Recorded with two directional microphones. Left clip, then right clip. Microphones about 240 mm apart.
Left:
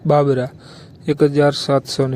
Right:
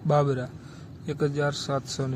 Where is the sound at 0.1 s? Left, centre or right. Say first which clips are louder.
Left 9 dB; left.